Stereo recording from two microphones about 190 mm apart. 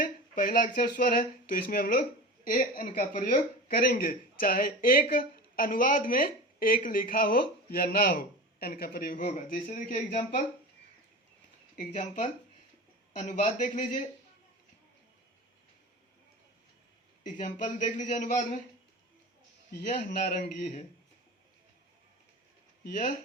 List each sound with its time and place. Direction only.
0.0 s a man's voice: 45° left (ahead or behind)
11.8 s a man's voice: 45° left (ahead or behind)
17.2 s a man's voice: 45° left (ahead or behind)
20.1 s a man's voice: 50° left (ahead or behind)